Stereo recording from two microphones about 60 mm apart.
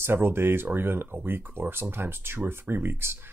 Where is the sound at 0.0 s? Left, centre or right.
Right.